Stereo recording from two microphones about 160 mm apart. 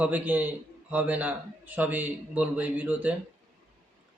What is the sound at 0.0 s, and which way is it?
A man's voice, 10° right (ahead or behind).